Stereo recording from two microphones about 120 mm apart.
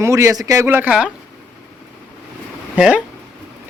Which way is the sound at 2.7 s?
10° right (ahead or behind).